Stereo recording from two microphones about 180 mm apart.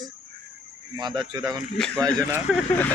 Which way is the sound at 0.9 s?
25° right (ahead or behind).